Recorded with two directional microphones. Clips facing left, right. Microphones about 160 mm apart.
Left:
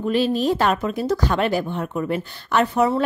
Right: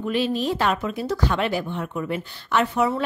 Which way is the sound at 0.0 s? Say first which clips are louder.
Left 4 dB; 40° left (ahead or behind).